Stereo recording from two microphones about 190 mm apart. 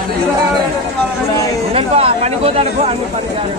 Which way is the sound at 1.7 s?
30° right (ahead or behind).